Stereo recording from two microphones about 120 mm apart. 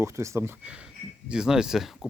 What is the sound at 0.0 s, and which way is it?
Speech, 25° right (ahead or behind).